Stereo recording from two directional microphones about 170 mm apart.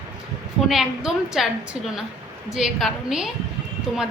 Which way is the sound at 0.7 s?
Centre (ahead or behind).